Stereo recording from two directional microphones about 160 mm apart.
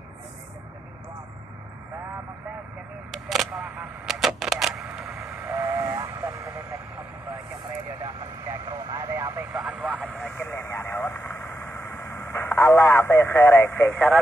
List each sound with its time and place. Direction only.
3.1 s a sound: centre (ahead or behind)
5.5 s train: 15° right (ahead or behind)
8.0 s vehicle: 15° right (ahead or behind)
10.0 s vehicle: 5° left (ahead or behind)